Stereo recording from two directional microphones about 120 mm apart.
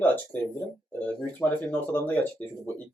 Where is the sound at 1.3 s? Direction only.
15° left (ahead or behind).